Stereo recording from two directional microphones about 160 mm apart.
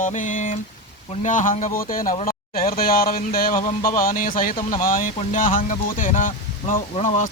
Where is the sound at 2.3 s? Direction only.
65° left (ahead or behind).